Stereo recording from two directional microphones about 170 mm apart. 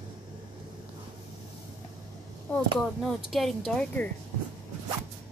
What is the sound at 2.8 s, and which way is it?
Speech, centre (ahead or behind).